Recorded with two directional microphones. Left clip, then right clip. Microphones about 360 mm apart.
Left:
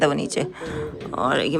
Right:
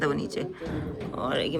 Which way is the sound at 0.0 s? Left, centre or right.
Centre.